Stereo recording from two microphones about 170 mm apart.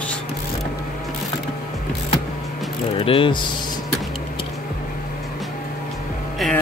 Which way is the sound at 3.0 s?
30° left (ahead or behind).